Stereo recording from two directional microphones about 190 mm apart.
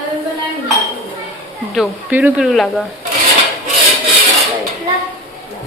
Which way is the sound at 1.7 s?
5° right (ahead or behind).